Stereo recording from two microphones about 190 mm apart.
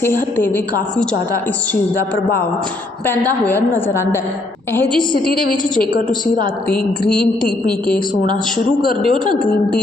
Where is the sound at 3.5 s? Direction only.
10° left (ahead or behind).